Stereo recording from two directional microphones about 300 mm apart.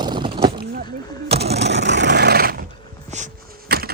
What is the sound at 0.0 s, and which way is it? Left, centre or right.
Boat, centre.